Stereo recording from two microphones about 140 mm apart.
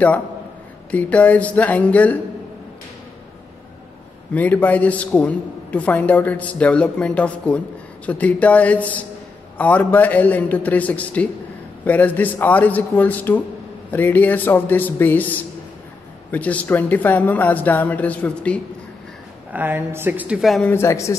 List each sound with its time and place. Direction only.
0.9 s a man's voice: 10° left (ahead or behind)
4.3 s a man's voice: 10° left (ahead or behind)
19.5 s a woman's voice: 15° right (ahead or behind)
20.6 s speech: 20° left (ahead or behind)